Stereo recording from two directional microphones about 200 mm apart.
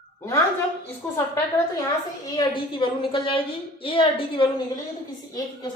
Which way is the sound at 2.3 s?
25° left (ahead or behind).